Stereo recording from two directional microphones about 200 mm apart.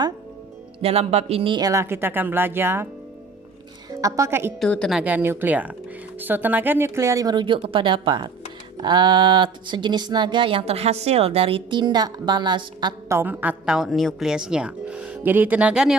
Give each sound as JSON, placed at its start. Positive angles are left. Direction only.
{"t": 0.8, "sound": "speech", "side_deg": -30}
{"t": 3.8, "sound": "a woman's voice", "side_deg": -15}
{"t": 4.6, "sound": "speech", "side_deg": 5}